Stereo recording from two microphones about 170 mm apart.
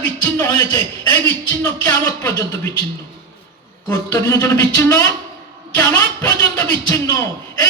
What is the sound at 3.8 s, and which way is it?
A man's voice, 15° left (ahead or behind).